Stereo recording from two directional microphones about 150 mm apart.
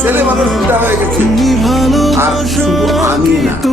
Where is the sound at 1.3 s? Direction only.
Centre (ahead or behind).